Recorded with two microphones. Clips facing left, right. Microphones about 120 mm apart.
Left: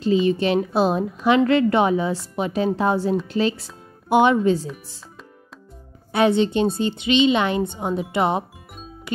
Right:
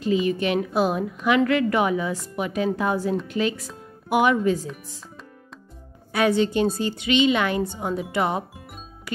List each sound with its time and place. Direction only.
0.0 s a woman's voice: 30° left (ahead or behind)
6.1 s a woman's voice: 25° left (ahead or behind)